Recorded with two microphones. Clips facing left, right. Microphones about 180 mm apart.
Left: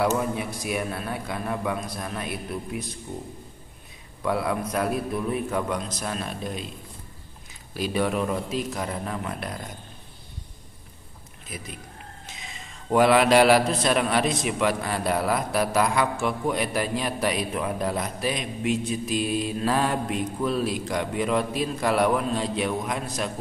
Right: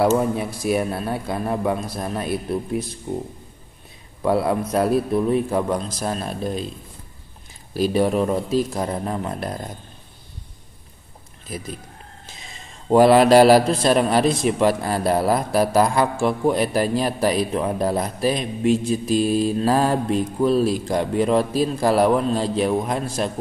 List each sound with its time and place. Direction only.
0.7 s a man's voice: 35° right (ahead or behind)
4.2 s a man's voice: 35° right (ahead or behind)
7.7 s a man's voice: 35° right (ahead or behind)
11.4 s speech: 35° right (ahead or behind)
12.9 s a man's voice: 35° right (ahead or behind)